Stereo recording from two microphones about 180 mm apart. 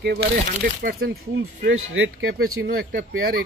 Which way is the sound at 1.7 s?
90° right.